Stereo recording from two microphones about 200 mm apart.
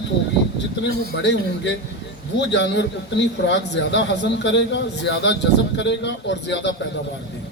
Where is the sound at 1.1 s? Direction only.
60° left (ahead or behind).